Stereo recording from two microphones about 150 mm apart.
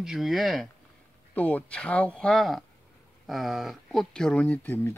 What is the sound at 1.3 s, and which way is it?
Speech, 10° left (ahead or behind).